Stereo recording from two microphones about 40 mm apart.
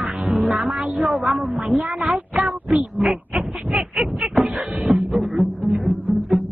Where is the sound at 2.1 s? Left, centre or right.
Centre.